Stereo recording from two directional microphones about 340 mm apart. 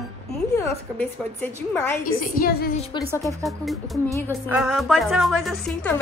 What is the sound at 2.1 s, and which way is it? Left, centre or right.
Speech, left.